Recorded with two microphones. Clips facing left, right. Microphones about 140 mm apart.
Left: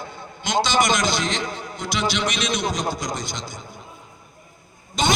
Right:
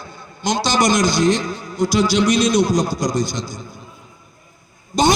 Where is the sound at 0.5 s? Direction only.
55° left (ahead or behind).